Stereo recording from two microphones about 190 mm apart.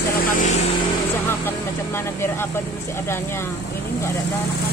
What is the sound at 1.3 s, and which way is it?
Speech, 10° left (ahead or behind).